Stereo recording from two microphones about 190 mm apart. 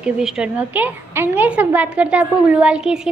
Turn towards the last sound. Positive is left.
turn(degrees=-5)  # may be behind; listen again after turning